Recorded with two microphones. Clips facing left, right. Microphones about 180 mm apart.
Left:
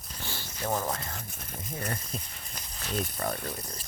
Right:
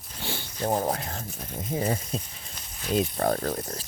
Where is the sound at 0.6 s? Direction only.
35° right (ahead or behind).